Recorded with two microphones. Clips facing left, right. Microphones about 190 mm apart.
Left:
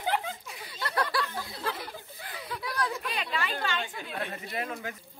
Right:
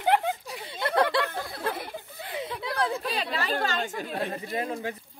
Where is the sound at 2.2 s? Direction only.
25° right (ahead or behind).